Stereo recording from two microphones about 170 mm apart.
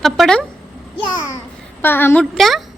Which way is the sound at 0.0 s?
Centre (ahead or behind).